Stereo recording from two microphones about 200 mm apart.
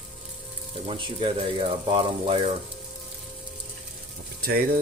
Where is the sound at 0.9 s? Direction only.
25° right (ahead or behind).